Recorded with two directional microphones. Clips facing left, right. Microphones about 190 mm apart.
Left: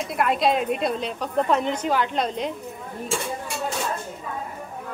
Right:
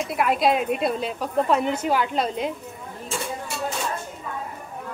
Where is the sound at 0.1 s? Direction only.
Centre (ahead or behind).